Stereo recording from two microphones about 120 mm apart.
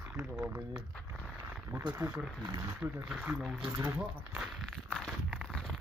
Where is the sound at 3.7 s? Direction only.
20° right (ahead or behind).